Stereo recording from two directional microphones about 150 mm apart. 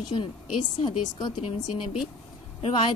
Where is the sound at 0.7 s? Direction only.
35° left (ahead or behind).